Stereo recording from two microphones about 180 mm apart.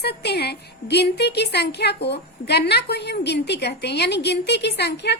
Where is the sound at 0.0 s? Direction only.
65° left (ahead or behind).